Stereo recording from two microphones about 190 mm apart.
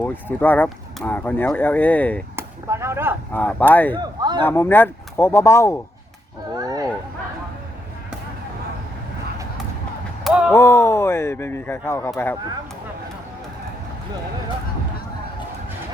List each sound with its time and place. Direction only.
0.0 s speech: 10° left (ahead or behind)
2.3 s speech: 15° right (ahead or behind)
3.3 s speech: 10° left (ahead or behind)
3.9 s speech: 25° right (ahead or behind)
4.4 s speech: 10° left (ahead or behind)
6.6 s a sound: 20° right (ahead or behind)
10.2 s a sound: 5° right (ahead or behind)
10.5 s speech: 15° left (ahead or behind)